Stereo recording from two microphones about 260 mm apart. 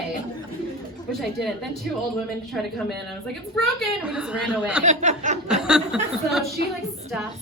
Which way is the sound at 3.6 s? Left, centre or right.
Centre.